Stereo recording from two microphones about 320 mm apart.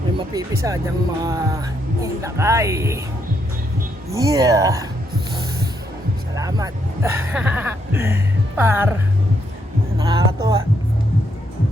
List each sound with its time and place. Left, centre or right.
0.3 s speech: centre
4.1 s speech: centre
6.3 s speech: centre
10.0 s speech: centre